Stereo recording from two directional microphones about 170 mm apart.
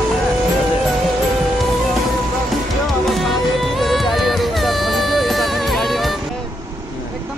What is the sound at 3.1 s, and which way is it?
Music, centre (ahead or behind).